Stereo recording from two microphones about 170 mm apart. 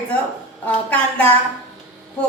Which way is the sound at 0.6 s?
10° left (ahead or behind).